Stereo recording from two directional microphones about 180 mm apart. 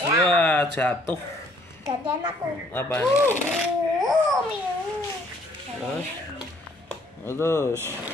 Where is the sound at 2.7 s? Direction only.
10° left (ahead or behind).